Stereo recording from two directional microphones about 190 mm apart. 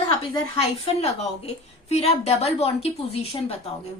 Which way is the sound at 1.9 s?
35° left (ahead or behind).